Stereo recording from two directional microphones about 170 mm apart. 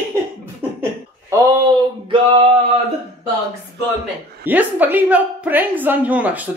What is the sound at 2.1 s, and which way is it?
Male singing, 30° right (ahead or behind).